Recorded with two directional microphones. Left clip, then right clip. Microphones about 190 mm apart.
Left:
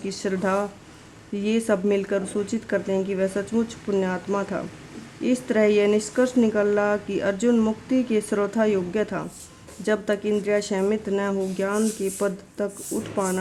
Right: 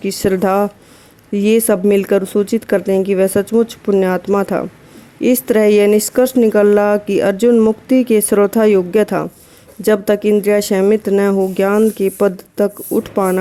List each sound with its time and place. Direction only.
0.0 s speech: 45° right (ahead or behind)